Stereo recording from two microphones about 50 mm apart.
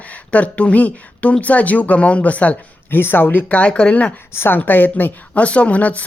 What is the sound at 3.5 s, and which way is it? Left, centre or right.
Speech, left.